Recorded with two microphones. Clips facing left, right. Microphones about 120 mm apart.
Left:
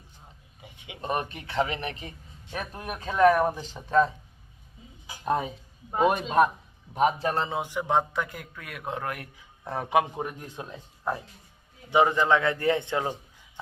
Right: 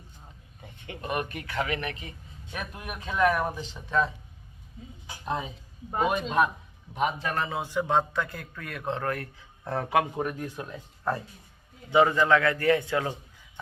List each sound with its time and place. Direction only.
0.6 s a sound: 10° left (ahead or behind)
1.0 s a man's voice: 30° left (ahead or behind)
5.2 s speech: 45° left (ahead or behind)
6.9 s a man's voice: 35° left (ahead or behind)